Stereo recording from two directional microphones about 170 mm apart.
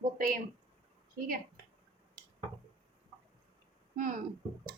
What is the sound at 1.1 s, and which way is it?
Speech, 60° right (ahead or behind).